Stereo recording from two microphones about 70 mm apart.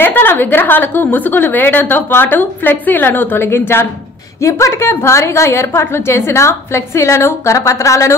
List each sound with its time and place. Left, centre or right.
0.0 s a woman's voice: left
3.4 s a woman's voice: left